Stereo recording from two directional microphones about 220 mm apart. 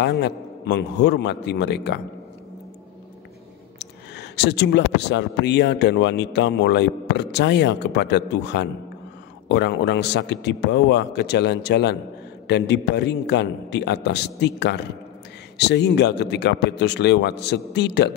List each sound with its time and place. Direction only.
0.0 s speech: 50° left (ahead or behind)
3.8 s speech: 50° left (ahead or behind)